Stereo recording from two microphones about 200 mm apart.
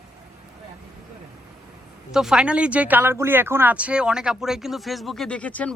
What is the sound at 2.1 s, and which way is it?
Speech, 5° right (ahead or behind).